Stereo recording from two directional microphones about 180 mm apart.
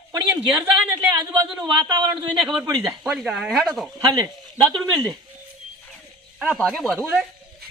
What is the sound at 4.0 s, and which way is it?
Speech, 20° right (ahead or behind).